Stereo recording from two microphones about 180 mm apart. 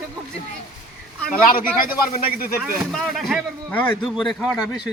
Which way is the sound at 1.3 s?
50° left (ahead or behind).